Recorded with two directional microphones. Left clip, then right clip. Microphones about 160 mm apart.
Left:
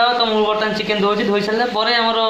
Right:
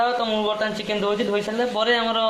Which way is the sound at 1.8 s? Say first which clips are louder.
Left 3 dB; 45° right (ahead or behind).